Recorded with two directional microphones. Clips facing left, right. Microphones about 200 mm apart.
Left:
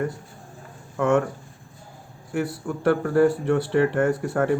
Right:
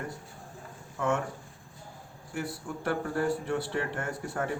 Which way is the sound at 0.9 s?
70° left (ahead or behind).